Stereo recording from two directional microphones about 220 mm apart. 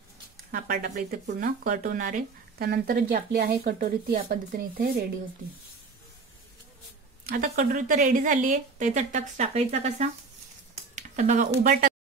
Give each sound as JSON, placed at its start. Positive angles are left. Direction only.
{"t": 0.5, "sound": "speech", "side_deg": -45}
{"t": 7.2, "sound": "speech", "side_deg": -40}